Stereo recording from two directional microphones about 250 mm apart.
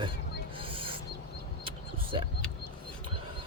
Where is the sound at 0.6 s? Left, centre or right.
Right.